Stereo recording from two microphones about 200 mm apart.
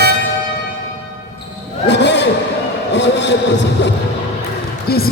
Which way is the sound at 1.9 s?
60° left (ahead or behind).